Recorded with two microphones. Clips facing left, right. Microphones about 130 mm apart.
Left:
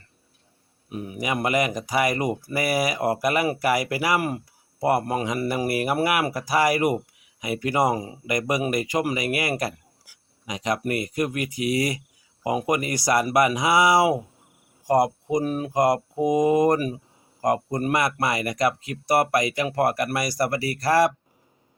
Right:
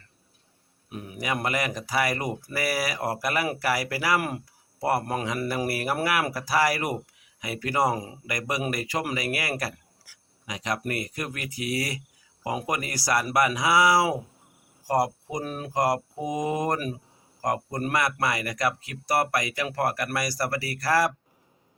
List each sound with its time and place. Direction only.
0.9 s speech: centre (ahead or behind)
1.2 s speech: 15° left (ahead or behind)
4.2 s speech: centre (ahead or behind)
4.8 s speech: 15° left (ahead or behind)
15.4 s speech: 5° left (ahead or behind)
15.7 s speech: 20° left (ahead or behind)